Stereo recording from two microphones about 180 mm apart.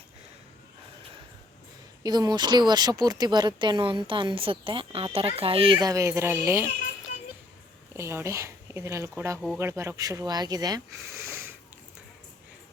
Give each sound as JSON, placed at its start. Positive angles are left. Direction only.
{"t": 2.0, "sound": "speech", "side_deg": -20}
{"t": 7.9, "sound": "speech", "side_deg": -15}